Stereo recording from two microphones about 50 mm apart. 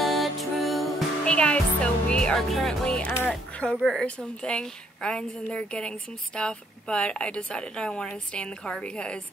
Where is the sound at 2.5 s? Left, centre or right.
Centre.